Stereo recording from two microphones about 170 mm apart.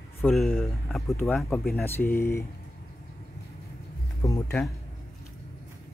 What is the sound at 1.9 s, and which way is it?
Speech, 15° left (ahead or behind).